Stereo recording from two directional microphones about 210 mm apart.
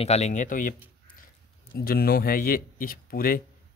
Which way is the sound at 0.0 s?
30° left (ahead or behind).